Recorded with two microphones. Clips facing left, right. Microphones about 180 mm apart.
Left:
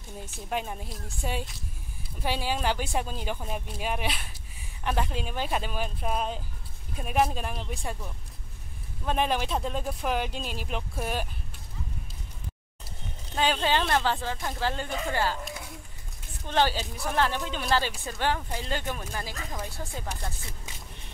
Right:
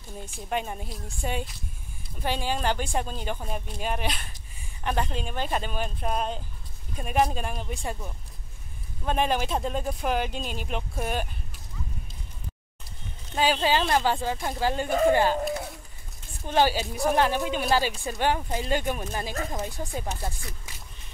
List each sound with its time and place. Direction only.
0.2 s speech: 5° left (ahead or behind)
9.0 s speech: centre (ahead or behind)
13.4 s speech: 5° right (ahead or behind)
14.9 s speech: 45° right (ahead or behind)
16.4 s speech: 10° right (ahead or behind)